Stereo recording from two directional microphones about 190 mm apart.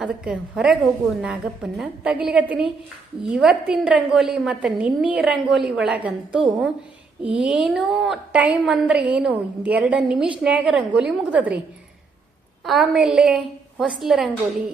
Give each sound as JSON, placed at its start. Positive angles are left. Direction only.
{"t": 0.0, "sound": "a woman's voice", "side_deg": -5}
{"t": 12.6, "sound": "a woman's voice", "side_deg": 0}